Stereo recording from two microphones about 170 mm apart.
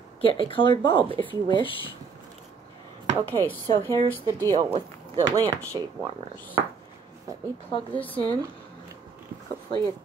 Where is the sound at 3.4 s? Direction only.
10° left (ahead or behind).